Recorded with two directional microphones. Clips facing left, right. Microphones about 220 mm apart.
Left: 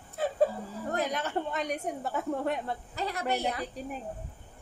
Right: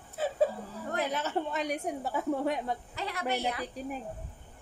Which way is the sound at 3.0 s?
40° left (ahead or behind).